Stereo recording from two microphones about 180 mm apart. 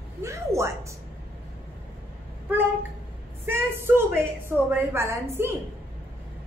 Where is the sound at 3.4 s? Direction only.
15° right (ahead or behind).